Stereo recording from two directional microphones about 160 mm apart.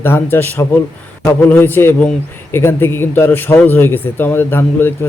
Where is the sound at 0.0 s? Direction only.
15° left (ahead or behind).